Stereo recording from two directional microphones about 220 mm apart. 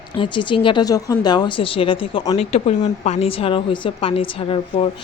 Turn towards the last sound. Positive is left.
turn(degrees=25)  # may be behind; listen again after turning